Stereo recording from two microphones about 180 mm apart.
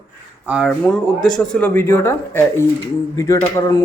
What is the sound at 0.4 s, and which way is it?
Speech, 5° right (ahead or behind).